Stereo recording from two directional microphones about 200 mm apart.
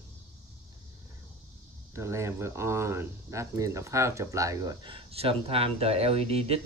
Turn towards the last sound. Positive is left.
turn(degrees=-30)  # may be behind; listen again after turning